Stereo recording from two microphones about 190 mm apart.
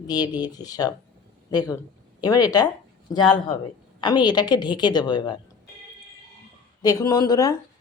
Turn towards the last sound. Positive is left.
turn(degrees=20)  # may be behind; listen again after turning